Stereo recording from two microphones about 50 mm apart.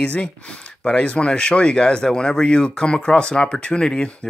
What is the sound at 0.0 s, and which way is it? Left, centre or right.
Speech, left.